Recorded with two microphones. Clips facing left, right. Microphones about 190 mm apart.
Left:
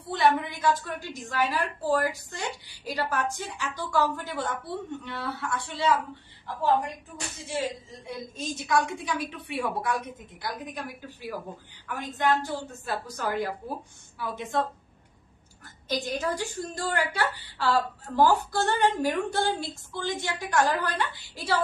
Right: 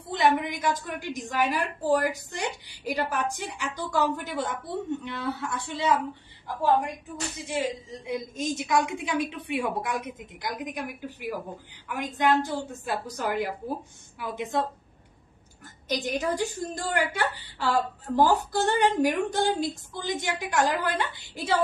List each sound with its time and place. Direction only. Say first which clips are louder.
0.1 s a woman's voice: even; 15° right (ahead or behind)
8.1 s a woman's voice: right 5 dB; 15° right (ahead or behind)
16.0 s a woman's voice: right 3 dB; 20° right (ahead or behind)